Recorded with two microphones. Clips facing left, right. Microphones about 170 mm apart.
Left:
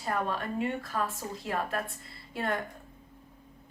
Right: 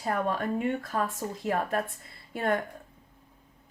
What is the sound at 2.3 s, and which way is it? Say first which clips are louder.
Speech: right 4 dB; 50° right (ahead or behind).